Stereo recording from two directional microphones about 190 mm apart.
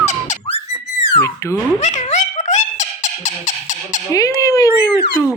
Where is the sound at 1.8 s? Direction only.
40° left (ahead or behind).